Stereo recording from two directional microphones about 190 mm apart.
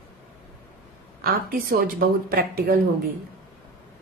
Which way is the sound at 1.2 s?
50° right (ahead or behind).